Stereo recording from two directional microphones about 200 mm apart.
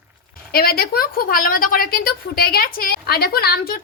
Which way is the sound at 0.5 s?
50° left (ahead or behind).